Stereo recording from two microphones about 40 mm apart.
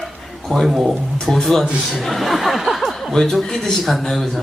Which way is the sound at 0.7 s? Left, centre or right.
Centre.